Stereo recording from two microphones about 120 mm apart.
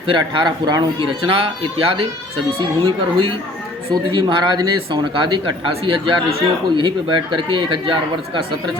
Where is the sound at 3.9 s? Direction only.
40° right (ahead or behind).